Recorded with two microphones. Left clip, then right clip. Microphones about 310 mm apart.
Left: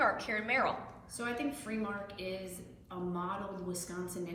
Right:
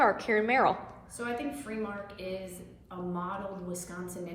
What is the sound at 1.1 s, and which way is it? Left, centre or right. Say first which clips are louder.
Speech: right 2 dB; centre.